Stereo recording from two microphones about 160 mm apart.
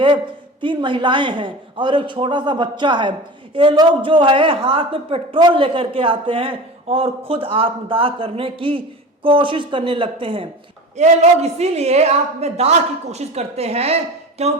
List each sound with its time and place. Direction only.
0.6 s a woman's voice: 30° right (ahead or behind)
10.9 s a woman's voice: 45° right (ahead or behind)